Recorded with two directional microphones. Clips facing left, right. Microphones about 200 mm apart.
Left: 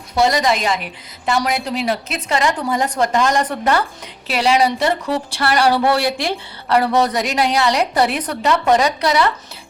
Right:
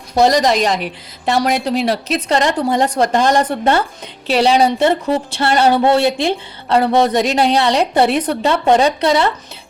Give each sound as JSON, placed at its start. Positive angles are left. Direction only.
{"t": 0.1, "sound": "a woman's voice", "side_deg": -40}